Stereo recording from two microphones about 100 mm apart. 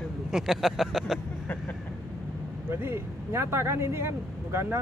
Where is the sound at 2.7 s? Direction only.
25° right (ahead or behind).